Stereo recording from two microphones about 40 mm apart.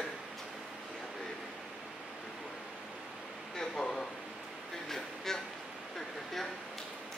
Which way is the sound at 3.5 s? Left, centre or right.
Centre.